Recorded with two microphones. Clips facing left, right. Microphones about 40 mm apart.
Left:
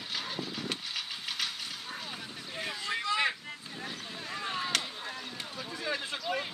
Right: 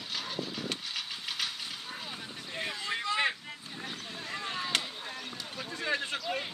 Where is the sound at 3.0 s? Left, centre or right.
Right.